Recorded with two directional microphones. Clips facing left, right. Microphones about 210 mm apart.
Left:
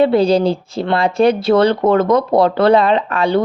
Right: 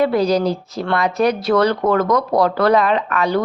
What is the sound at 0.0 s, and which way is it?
Speech, 30° left (ahead or behind).